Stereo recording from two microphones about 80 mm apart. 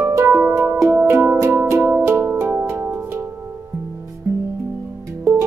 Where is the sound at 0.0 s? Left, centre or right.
Right.